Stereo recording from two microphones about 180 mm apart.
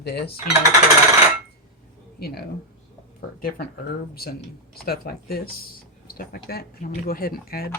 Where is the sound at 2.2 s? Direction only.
60° left (ahead or behind).